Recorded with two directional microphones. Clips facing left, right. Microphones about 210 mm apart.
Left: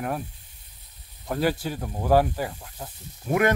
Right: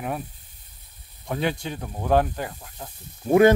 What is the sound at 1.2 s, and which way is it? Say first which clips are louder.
Speech: left 2 dB; 5° left (ahead or behind).